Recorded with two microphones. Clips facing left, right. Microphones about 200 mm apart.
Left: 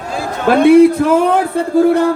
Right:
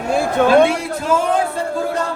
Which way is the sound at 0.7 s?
60° left (ahead or behind).